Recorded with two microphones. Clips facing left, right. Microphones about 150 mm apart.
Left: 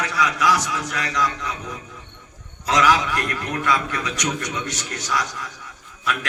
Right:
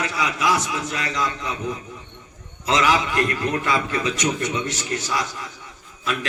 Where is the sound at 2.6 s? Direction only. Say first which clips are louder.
Left 1 dB; 25° right (ahead or behind).